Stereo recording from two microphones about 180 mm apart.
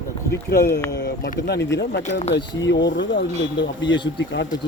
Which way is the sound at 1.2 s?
65° left (ahead or behind).